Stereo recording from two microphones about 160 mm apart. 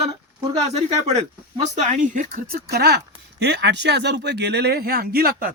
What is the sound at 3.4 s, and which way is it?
Speech, 90° right.